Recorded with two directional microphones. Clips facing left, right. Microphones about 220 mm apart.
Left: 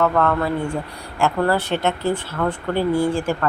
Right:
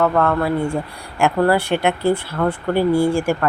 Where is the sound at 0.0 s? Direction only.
10° right (ahead or behind).